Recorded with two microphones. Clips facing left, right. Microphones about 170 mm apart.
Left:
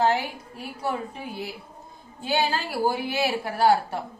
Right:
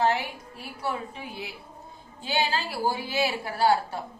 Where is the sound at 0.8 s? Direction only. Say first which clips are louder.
Left 2 dB; 45° left (ahead or behind).